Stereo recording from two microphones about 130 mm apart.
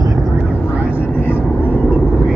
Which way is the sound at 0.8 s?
10° right (ahead or behind).